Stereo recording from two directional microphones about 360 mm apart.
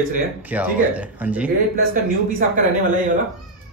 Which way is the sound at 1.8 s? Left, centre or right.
Right.